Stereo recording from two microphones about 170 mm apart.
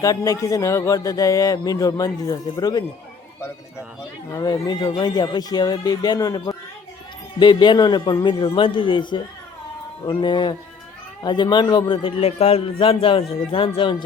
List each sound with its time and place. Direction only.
0.0 s speech: 20° left (ahead or behind)
4.3 s a man's voice: 20° left (ahead or behind)